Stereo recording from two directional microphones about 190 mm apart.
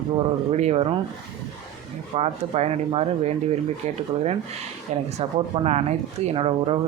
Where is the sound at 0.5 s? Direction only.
35° right (ahead or behind).